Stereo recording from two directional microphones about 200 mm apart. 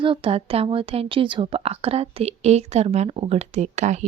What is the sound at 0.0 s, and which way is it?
A woman's voice, 25° right (ahead or behind).